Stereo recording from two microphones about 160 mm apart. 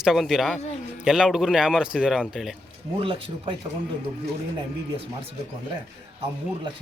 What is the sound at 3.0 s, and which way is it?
Speech, 35° right (ahead or behind).